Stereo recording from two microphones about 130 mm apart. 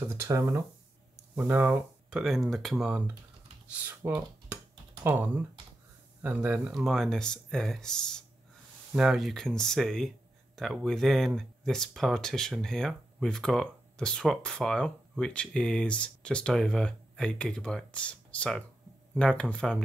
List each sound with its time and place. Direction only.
0.0 s speech: 20° right (ahead or behind); by 2.9 s centre (ahead or behind)
3.8 s speech: 15° right (ahead or behind); by 19.8 s 5° left (ahead or behind)